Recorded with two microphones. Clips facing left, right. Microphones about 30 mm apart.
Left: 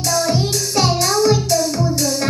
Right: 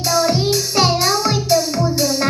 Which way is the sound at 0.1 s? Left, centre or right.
Centre.